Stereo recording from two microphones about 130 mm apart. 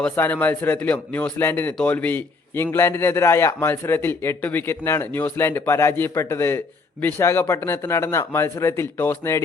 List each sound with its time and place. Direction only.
0.0 s speech: 15° left (ahead or behind)